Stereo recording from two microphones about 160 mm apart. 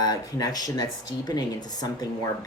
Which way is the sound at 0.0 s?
25° left (ahead or behind).